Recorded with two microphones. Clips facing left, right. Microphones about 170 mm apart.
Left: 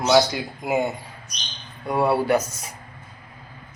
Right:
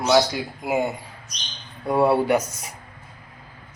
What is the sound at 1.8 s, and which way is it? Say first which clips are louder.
Speech: right 2 dB; 25° right (ahead or behind).